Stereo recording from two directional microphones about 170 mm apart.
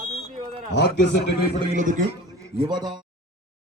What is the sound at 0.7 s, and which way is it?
Speech, 75° left (ahead or behind).